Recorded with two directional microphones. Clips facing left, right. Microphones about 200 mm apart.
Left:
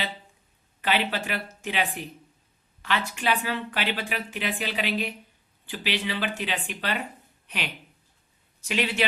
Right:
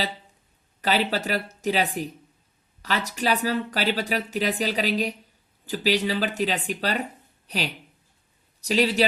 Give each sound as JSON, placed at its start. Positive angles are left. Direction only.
{"t": 0.8, "sound": "a woman's voice", "side_deg": -40}